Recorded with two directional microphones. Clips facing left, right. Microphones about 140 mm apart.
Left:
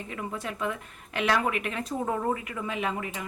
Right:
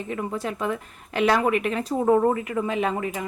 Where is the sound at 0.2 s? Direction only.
35° right (ahead or behind).